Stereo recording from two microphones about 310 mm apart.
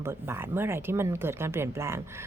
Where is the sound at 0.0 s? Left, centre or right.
Centre.